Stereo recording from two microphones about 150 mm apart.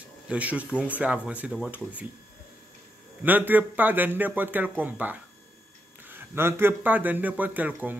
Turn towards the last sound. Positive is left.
turn(degrees=-10)  # may be behind; listen again after turning